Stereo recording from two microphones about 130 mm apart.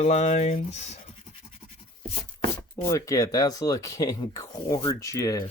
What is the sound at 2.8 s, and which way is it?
Speech, 25° left (ahead or behind).